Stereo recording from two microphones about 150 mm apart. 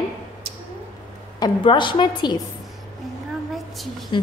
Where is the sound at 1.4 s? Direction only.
30° left (ahead or behind).